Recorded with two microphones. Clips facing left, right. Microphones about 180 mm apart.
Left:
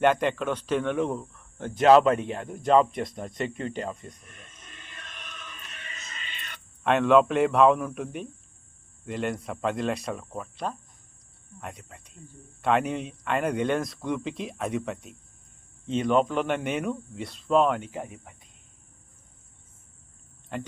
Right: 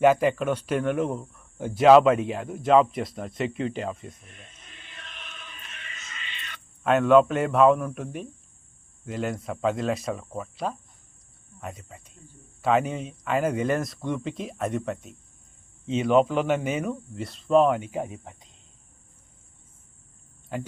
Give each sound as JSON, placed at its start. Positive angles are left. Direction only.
{"t": 0.0, "sound": "speech", "side_deg": -5}
{"t": 4.1, "sound": "music", "side_deg": 45}
{"t": 6.8, "sound": "speech", "side_deg": 0}
{"t": 20.5, "sound": "speech", "side_deg": -5}